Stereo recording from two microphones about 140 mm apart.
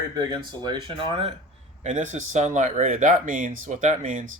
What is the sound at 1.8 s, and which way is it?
Speech, 60° right (ahead or behind).